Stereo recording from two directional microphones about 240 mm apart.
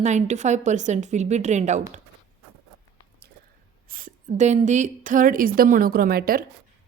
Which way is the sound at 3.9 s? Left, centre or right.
Right.